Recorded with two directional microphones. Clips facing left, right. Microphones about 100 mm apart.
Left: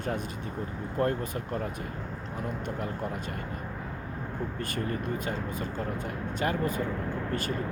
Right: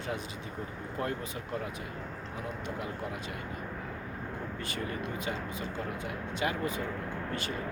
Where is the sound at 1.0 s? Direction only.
45° left (ahead or behind).